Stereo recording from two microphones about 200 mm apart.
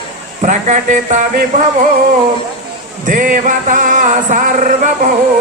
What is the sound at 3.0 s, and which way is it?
Music, 45° right (ahead or behind).